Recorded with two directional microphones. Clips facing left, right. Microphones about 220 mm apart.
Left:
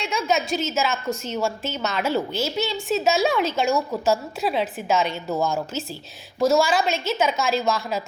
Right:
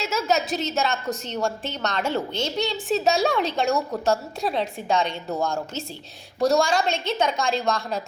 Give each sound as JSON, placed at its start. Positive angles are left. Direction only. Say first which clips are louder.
{"t": 0.0, "sound": "a woman's voice", "louder": "even", "side_deg": -5}